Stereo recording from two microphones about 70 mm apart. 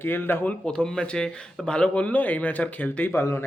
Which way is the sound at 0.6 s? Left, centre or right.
Centre.